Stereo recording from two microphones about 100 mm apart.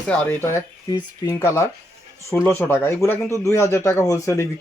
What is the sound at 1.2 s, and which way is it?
Speech, 30° left (ahead or behind).